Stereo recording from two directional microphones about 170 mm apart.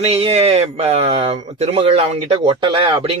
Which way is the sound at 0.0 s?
35° right (ahead or behind).